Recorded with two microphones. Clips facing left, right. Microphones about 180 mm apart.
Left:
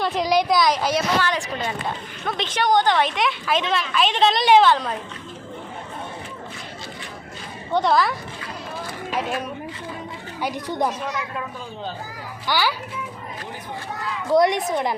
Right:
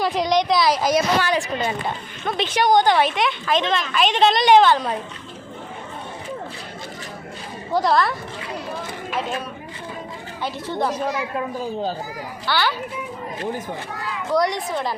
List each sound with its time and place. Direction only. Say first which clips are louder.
0.0 s a woman's voice: right 1 dB; centre (ahead or behind)
0.9 s a woman's voice: right 3 dB; 15° right (ahead or behind)
3.2 s a woman's voice: right 2 dB; 5° left (ahead or behind)
7.7 s a woman's voice: even; centre (ahead or behind)
10.4 s speech: even; 15° left (ahead or behind)
11.0 s a man's voice: right 4 dB; 30° right (ahead or behind)
12.5 s speech: even; 10° left (ahead or behind)
14.3 s a woman's voice: left 3 dB; 20° left (ahead or behind)